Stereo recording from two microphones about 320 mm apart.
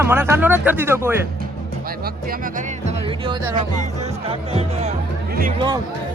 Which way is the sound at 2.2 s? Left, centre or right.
Right.